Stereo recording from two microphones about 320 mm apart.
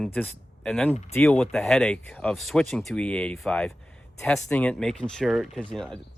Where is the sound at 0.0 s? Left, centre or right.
Centre.